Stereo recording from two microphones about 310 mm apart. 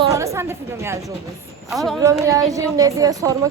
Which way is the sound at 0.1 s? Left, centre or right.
Centre.